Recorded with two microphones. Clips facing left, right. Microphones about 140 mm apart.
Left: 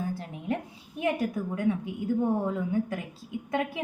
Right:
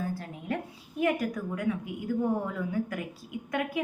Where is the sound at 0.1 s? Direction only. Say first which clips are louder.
Left 2 dB; 25° left (ahead or behind).